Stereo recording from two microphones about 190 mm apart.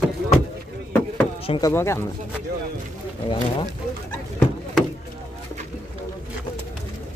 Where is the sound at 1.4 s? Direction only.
25° left (ahead or behind).